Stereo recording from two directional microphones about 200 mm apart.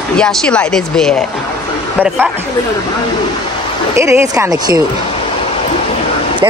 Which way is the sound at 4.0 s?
15° right (ahead or behind).